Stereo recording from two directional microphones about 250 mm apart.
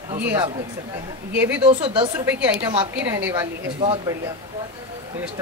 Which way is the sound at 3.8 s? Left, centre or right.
Right.